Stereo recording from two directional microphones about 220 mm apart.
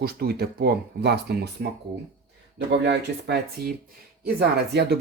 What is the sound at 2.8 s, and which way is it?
Speech, 50° right (ahead or behind).